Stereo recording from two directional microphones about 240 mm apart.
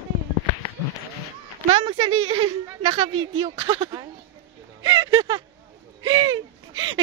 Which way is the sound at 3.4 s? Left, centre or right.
Centre.